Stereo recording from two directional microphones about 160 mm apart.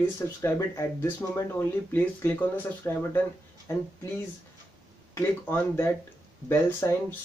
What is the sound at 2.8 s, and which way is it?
Speech, 15° left (ahead or behind).